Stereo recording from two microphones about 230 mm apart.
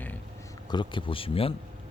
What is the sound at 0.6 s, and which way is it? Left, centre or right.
Speech, left.